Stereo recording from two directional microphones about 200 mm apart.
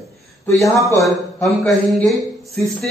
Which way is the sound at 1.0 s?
Centre (ahead or behind).